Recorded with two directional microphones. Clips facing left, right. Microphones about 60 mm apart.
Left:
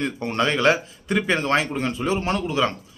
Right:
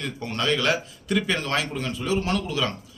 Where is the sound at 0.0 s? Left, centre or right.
Left.